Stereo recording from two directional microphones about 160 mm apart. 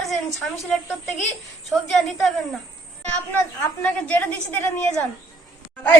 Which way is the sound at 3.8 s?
10° left (ahead or behind).